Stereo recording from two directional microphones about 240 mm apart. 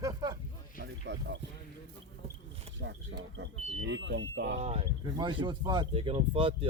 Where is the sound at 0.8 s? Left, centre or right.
Right.